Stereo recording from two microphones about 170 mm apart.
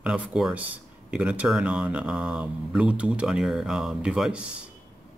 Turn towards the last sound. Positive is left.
turn(degrees=-5)  # may be behind; listen again after turning